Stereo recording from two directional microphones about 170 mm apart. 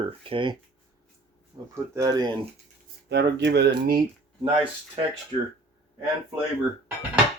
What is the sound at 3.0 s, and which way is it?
Speech, 85° right.